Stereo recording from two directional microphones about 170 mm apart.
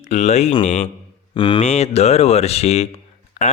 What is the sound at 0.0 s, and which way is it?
Speech, 40° left (ahead or behind).